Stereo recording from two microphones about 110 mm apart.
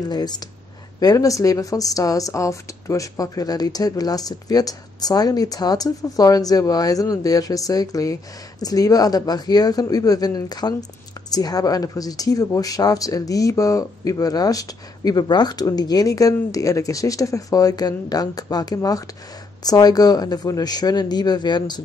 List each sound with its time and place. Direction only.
0.1 s a woman's voice: 40° left (ahead or behind)